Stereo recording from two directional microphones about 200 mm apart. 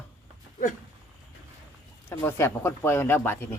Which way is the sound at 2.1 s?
10° left (ahead or behind).